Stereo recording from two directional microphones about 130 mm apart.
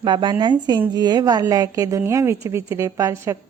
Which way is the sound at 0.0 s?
35° right (ahead or behind).